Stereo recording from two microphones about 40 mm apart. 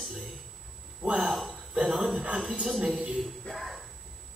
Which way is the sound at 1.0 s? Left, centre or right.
Right.